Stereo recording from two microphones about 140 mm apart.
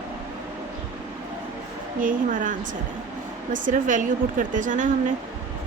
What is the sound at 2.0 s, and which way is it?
A woman's voice, 70° right (ahead or behind).